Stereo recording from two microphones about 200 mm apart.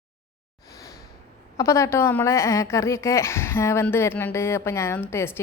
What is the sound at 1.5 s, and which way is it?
A woman's voice, 15° left (ahead or behind).